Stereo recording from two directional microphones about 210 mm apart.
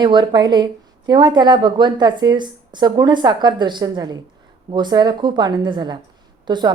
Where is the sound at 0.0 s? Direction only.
20° right (ahead or behind).